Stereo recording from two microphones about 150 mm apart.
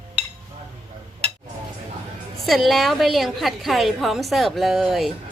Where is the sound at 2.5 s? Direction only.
Centre (ahead or behind).